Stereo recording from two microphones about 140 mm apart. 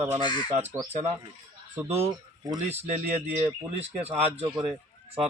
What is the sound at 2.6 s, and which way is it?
Speech, 50° right (ahead or behind).